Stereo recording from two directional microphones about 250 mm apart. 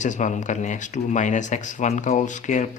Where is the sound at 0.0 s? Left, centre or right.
Left.